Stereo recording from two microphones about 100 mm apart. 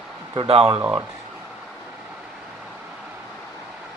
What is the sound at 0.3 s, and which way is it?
Speech, 75° right (ahead or behind).